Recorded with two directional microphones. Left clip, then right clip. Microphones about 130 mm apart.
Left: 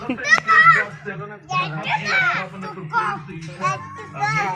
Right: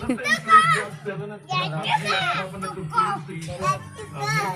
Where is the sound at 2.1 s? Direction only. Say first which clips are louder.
Left 4 dB; 40° right (ahead or behind).